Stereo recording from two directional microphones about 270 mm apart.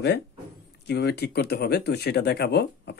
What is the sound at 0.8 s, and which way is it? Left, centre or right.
Speech, left.